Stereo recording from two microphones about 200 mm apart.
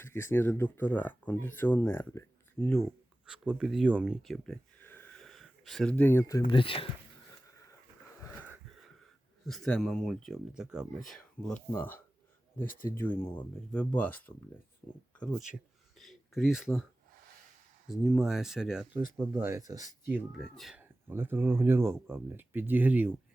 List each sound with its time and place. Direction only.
0.0 s speech: 10° left (ahead or behind)
3.2 s speech: 5° right (ahead or behind); by 6.4 s 15° left (ahead or behind)
6.5 s speech: 25° left (ahead or behind)
9.5 s speech: 5° left (ahead or behind)
17.8 s speech: centre (ahead or behind)